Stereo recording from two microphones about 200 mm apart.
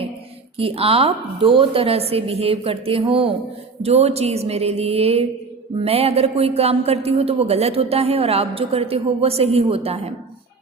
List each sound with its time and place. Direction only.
0.5 s a man's voice: 30° right (ahead or behind)